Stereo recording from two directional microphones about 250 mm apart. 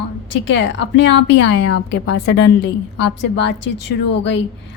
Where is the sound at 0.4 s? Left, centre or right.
Left.